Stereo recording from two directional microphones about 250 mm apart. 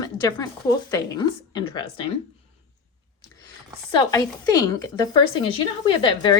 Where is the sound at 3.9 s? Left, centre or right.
Centre.